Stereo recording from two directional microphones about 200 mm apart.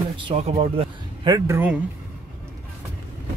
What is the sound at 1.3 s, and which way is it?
Speech, 10° right (ahead or behind).